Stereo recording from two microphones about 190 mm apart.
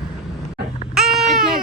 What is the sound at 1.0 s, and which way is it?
Baby cry, centre (ahead or behind).